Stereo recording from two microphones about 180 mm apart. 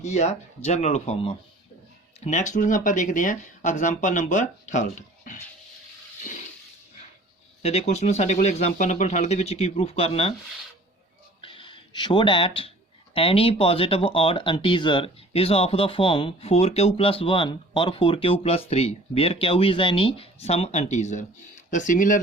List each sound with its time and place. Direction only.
0.0 s speech: 40° left (ahead or behind)
7.6 s speech: 35° left (ahead or behind)
11.3 s a sound: 30° left (ahead or behind)
13.1 s speech: 30° left (ahead or behind); by 22.2 s 45° left (ahead or behind)